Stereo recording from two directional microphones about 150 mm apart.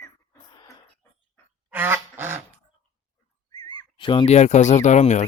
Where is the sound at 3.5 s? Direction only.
30° left (ahead or behind); by 5.2 s 50° left (ahead or behind).